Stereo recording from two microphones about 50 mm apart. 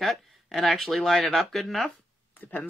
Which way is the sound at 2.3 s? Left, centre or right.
Left.